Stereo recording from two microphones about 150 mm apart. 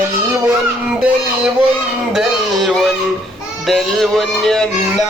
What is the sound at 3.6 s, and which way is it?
Music, centre (ahead or behind).